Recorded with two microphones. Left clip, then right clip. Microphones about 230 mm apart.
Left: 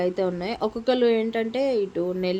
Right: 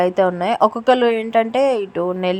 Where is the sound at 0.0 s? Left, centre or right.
Centre.